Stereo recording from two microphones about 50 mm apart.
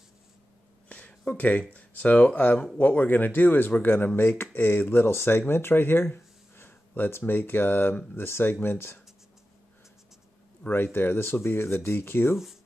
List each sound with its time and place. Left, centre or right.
0.8 s a sound: left
1.7 s speech: left
10.7 s speech: left